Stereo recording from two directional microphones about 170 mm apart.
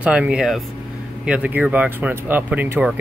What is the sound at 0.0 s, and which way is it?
Speech, 5° right (ahead or behind).